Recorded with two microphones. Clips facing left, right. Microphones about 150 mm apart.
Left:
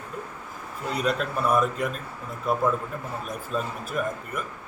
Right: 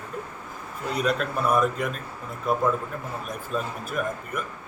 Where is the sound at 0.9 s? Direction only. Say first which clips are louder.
Right 1 dB; centre (ahead or behind).